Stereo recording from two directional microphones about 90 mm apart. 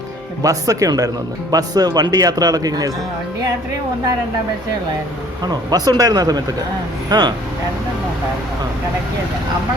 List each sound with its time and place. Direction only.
0.4 s speech: 40° right (ahead or behind)
5.4 s speech: 50° right (ahead or behind)